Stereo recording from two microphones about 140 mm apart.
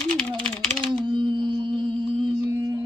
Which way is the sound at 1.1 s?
35° right (ahead or behind).